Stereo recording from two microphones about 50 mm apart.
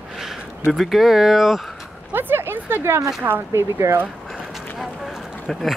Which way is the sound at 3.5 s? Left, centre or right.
Right.